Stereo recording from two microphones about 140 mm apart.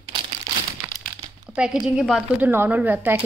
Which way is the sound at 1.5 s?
5° right (ahead or behind).